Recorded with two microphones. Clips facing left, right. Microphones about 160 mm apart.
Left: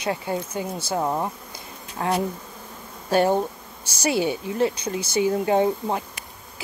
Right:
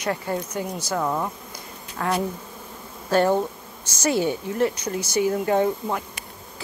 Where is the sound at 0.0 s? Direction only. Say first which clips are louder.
Even; 20° left (ahead or behind).